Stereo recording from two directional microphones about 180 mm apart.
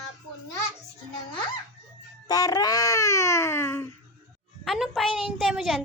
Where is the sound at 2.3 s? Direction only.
20° left (ahead or behind).